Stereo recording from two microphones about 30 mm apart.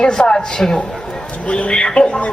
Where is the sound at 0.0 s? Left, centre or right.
Left.